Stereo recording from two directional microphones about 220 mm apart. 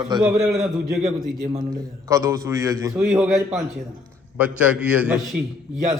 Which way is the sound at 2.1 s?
15° right (ahead or behind).